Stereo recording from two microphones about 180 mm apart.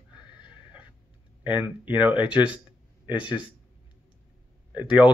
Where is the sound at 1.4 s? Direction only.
10° right (ahead or behind).